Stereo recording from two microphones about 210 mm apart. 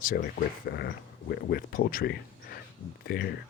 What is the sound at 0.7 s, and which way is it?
Speech, 50° left (ahead or behind).